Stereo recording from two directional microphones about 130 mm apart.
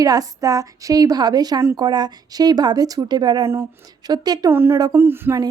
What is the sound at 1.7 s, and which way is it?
Speech, 35° right (ahead or behind).